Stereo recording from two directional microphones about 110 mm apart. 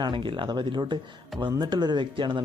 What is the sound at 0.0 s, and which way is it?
Speech, 50° right (ahead or behind).